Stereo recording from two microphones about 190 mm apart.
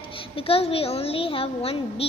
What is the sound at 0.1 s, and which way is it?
A woman's voice, 30° left (ahead or behind).